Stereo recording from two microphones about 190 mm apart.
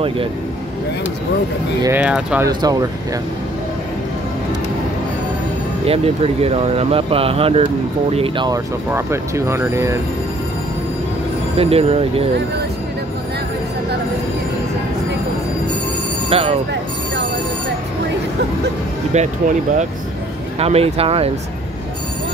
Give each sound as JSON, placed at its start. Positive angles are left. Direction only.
{"t": 1.8, "sound": "speech", "side_deg": -10}
{"t": 2.4, "sound": "speech", "side_deg": -20}
{"t": 5.9, "sound": "speech", "side_deg": -30}
{"t": 8.9, "sound": "speech", "side_deg": -15}
{"t": 11.5, "sound": "speech", "side_deg": -30}
{"t": 16.3, "sound": "speech", "side_deg": -30}
{"t": 19.1, "sound": "speech", "side_deg": -40}